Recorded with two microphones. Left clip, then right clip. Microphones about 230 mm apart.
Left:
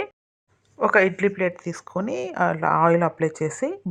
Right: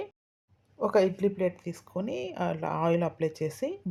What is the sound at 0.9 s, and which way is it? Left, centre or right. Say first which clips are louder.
Speech: left 5 dB; centre.